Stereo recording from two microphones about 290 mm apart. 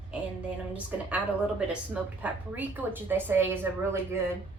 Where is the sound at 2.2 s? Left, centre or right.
Centre.